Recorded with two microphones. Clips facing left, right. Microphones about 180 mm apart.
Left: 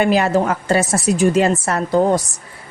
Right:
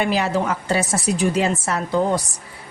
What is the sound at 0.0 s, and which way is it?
Speech, 50° left (ahead or behind).